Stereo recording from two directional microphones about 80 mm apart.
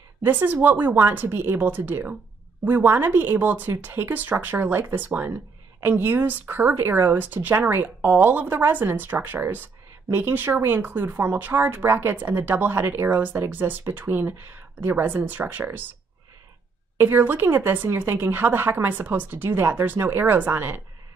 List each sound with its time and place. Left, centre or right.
0.2 s speech: right
17.0 s speech: right